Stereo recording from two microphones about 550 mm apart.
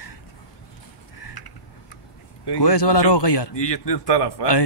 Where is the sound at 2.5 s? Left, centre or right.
Left.